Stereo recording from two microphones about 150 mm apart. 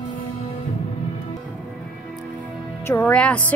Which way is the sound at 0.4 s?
45° left (ahead or behind).